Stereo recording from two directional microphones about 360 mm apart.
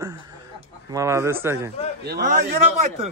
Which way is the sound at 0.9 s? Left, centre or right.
Centre.